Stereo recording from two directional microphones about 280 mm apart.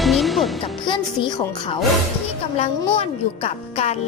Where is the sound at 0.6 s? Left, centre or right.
Centre.